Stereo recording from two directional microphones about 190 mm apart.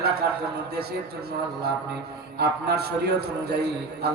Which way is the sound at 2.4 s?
55° right (ahead or behind).